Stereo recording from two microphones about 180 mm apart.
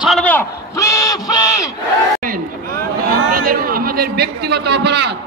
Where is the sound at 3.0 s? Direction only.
50° right (ahead or behind); by 5.1 s 70° right (ahead or behind).